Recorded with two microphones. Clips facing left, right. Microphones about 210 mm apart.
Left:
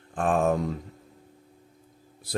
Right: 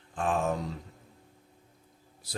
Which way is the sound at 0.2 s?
55° left (ahead or behind).